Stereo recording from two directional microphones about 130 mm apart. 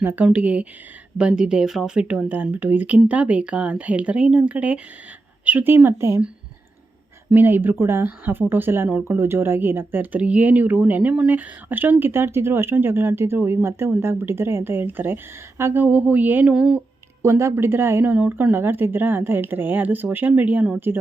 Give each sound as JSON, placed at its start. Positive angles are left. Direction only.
{"t": 0.0, "sound": "speech", "side_deg": -15}
{"t": 7.3, "sound": "speech", "side_deg": -15}
{"t": 17.2, "sound": "speech", "side_deg": -20}